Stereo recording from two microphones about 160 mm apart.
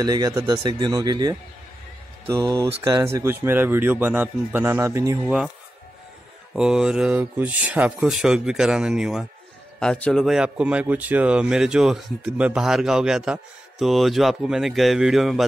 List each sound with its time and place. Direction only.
0.0 s speech: 25° right (ahead or behind)
6.5 s speech: 5° right (ahead or behind)